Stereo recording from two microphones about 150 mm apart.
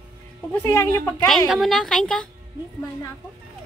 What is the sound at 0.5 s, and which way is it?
Speech, 15° left (ahead or behind).